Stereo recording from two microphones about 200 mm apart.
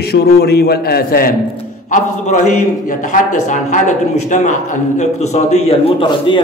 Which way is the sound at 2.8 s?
40° left (ahead or behind).